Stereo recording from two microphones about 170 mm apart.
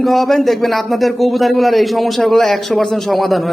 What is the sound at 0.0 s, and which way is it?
Speech, centre (ahead or behind).